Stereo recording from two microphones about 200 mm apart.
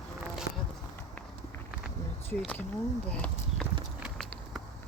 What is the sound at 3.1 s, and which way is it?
Clip-clop, 5° left (ahead or behind).